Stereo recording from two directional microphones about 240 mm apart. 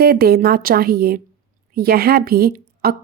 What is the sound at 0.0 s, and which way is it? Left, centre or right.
Speech, right.